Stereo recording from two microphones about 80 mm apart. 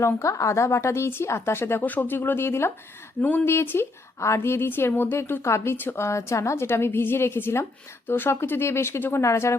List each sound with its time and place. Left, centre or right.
0.0 s a woman's voice: left
3.2 s a woman's voice: left
6.1 s a woman's voice: left